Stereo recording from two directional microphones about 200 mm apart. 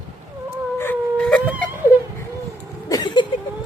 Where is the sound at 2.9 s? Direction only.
20° left (ahead or behind).